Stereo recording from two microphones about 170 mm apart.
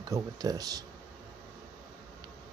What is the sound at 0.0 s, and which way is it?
Speech, 20° right (ahead or behind).